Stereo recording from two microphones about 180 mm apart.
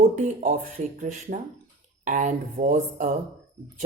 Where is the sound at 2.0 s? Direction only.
45° right (ahead or behind).